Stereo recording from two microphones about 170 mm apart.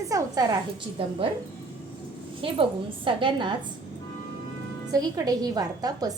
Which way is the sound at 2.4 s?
30° right (ahead or behind).